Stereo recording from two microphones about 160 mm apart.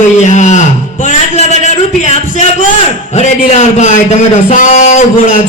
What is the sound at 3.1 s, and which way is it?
A man's voice, 45° left (ahead or behind).